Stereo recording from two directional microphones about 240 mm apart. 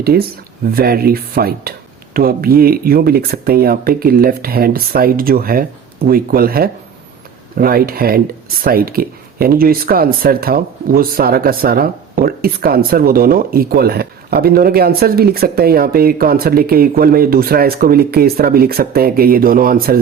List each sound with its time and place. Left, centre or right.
0.0 s speech: right